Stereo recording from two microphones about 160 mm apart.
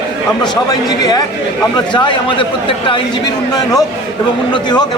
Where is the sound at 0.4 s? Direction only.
25° left (ahead or behind).